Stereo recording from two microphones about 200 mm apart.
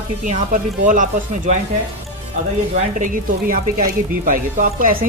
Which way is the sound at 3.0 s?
45° right (ahead or behind).